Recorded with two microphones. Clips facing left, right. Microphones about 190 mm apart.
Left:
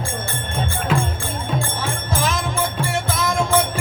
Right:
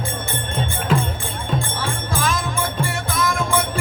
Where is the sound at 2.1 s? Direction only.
25° left (ahead or behind).